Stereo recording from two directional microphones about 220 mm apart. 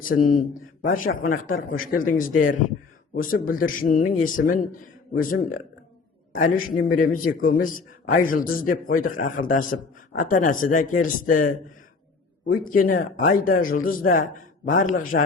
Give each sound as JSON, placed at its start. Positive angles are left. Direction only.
{"t": 0.0, "sound": "speech", "side_deg": 40}